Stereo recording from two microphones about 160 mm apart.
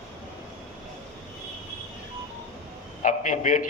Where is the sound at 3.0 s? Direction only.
50° left (ahead or behind).